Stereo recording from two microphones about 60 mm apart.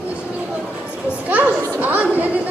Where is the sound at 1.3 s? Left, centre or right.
Right.